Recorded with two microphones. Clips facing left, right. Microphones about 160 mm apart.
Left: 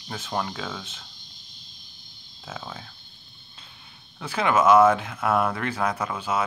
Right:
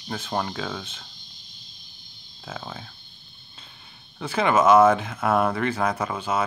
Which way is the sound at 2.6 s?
5° right (ahead or behind).